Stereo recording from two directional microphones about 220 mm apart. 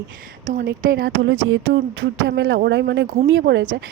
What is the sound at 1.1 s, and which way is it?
Speech, 55° right (ahead or behind).